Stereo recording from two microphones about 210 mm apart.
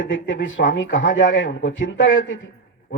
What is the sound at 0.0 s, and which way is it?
Speech, 65° left (ahead or behind).